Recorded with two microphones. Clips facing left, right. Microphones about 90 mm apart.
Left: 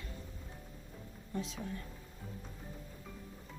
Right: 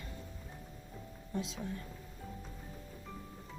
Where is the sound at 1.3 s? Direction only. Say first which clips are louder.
Right 1 dB; 15° right (ahead or behind).